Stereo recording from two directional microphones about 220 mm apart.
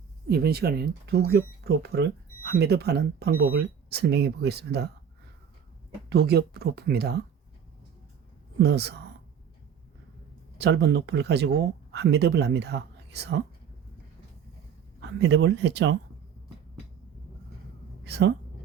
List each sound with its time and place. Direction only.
0.3 s speech: 45° right (ahead or behind)
3.3 s speech: 70° right (ahead or behind)
3.8 s speech: 50° right (ahead or behind)
6.1 s speech: 45° right (ahead or behind)
8.5 s speech: 50° right (ahead or behind)
10.6 s speech: 50° right (ahead or behind)
15.0 s speech: 55° right (ahead or behind)
18.0 s speech: 50° right (ahead or behind)